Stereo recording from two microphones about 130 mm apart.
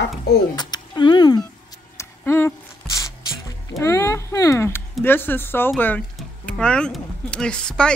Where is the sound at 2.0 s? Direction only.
20° left (ahead or behind).